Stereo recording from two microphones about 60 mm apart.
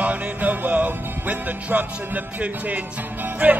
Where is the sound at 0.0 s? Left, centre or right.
Right.